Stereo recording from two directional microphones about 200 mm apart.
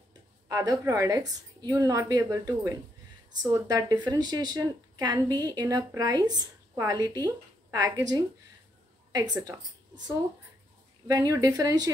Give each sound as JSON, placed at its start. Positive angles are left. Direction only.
{"t": 0.5, "sound": "a woman's voice", "side_deg": -15}
{"t": 11.1, "sound": "a woman's voice", "side_deg": -15}